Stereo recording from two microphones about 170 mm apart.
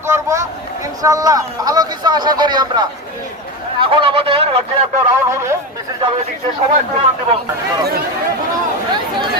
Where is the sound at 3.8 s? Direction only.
30° right (ahead or behind).